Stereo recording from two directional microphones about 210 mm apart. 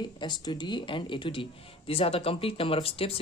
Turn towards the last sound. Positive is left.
turn(degrees=25)  # may be behind; listen again after turning